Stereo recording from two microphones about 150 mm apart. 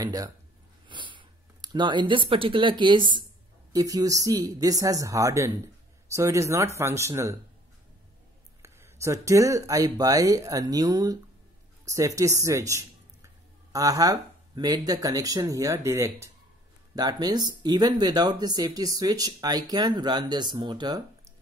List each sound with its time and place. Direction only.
0.0 s speech: 25° right (ahead or behind)
8.6 s speech: 15° right (ahead or behind)